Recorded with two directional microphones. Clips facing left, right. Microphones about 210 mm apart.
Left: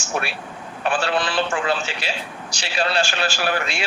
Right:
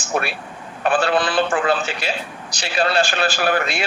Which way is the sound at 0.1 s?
55° right (ahead or behind).